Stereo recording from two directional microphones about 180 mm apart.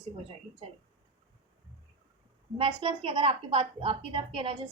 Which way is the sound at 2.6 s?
30° right (ahead or behind).